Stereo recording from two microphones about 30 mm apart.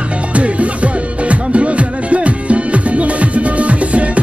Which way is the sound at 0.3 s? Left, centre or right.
Right.